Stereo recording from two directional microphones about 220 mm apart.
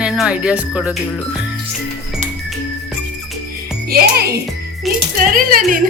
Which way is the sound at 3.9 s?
45° right (ahead or behind).